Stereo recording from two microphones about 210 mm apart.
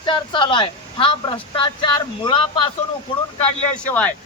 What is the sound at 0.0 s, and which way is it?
Speech, 25° left (ahead or behind).